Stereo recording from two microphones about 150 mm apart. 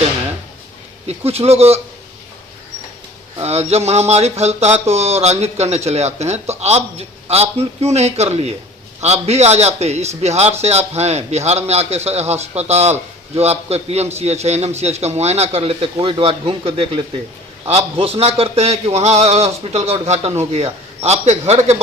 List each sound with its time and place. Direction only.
1.0 s a man's voice: 45° right (ahead or behind)
3.4 s a man's voice: 45° right (ahead or behind)